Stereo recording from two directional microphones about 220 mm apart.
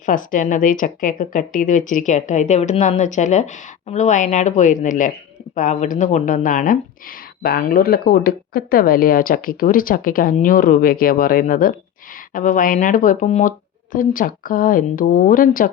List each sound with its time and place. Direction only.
0.0 s speech: 40° left (ahead or behind)